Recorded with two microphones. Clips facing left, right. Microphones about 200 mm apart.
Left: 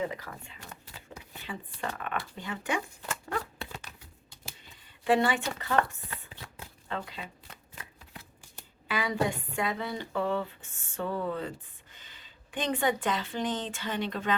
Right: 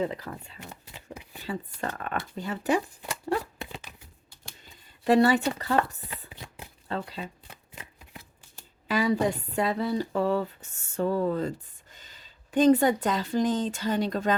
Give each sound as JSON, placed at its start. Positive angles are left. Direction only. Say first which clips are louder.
{"t": 0.1, "sound": "speech", "louder": "right 4 dB", "side_deg": -35}
{"t": 0.7, "sound": "shuffling cards", "louder": "right 2 dB", "side_deg": -20}
{"t": 1.5, "sound": "speech", "louder": "right 4 dB", "side_deg": -40}
{"t": 3.6, "sound": "a sound", "louder": "right 2 dB", "side_deg": -15}
{"t": 5.0, "sound": "speech", "louder": "right 5 dB", "side_deg": -40}
{"t": 6.1, "sound": "chopping", "louder": "right 2 dB", "side_deg": -20}
{"t": 6.8, "sound": "speech", "louder": "right 4 dB", "side_deg": -35}
{"t": 7.4, "sound": "shuffling cards", "louder": "right 2 dB", "side_deg": -15}
{"t": 8.9, "sound": "speech", "louder": "right 5 dB", "side_deg": -40}